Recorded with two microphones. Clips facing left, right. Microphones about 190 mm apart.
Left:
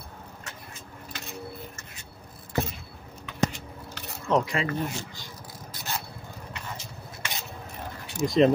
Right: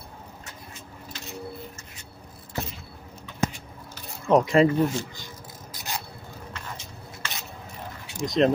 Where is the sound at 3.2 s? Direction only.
75° left (ahead or behind).